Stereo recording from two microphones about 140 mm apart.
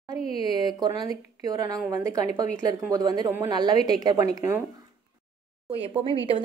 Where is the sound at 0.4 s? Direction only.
30° right (ahead or behind).